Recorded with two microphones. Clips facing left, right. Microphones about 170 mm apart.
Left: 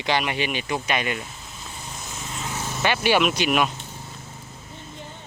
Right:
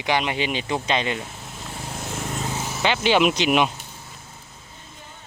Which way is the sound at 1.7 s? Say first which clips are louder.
Right 7 dB; 65° right (ahead or behind).